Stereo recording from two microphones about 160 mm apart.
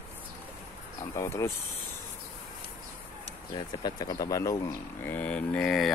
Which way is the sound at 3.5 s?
25° left (ahead or behind).